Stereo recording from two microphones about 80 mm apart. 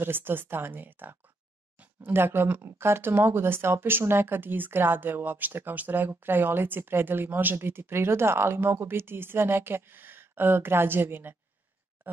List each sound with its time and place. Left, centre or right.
0.0 s speech: right